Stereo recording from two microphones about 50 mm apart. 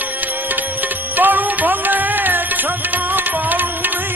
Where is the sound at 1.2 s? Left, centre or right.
Right.